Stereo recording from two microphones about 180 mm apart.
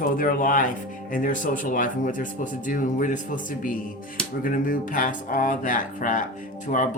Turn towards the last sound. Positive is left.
turn(degrees=50)  # may be behind; listen again after turning